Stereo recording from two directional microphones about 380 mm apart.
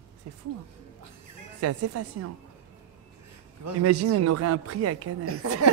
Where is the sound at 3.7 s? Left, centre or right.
Right.